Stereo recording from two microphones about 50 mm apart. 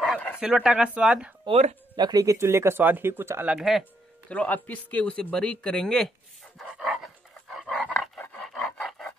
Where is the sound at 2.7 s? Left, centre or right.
Right.